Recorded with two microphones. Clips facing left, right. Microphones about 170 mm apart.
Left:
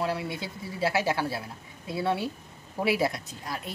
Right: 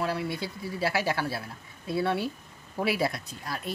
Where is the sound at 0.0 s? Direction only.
20° left (ahead or behind).